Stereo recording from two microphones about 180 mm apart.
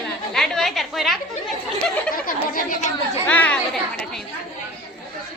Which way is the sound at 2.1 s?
50° left (ahead or behind).